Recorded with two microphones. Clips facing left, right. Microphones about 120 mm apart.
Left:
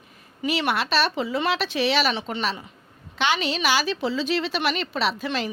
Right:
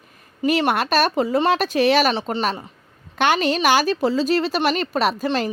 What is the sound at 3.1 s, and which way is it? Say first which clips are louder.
A woman's voice: right 5 dB; 50° right (ahead or behind).